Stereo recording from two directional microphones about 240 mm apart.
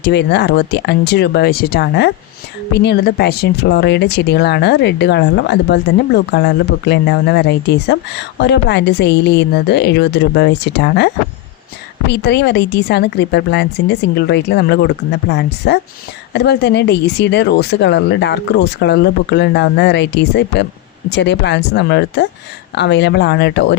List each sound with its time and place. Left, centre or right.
0.0 s speech: left